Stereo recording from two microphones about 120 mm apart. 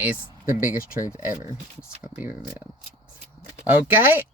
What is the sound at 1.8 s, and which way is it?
Speech, 10° right (ahead or behind).